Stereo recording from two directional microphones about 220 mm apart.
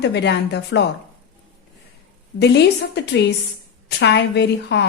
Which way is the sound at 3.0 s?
50° left (ahead or behind).